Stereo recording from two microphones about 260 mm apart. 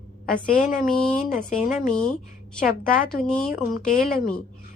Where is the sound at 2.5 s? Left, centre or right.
Left.